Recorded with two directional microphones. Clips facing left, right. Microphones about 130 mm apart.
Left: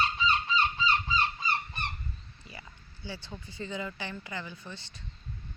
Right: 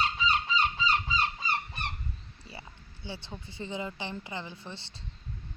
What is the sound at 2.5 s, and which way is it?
Speech, 25° right (ahead or behind).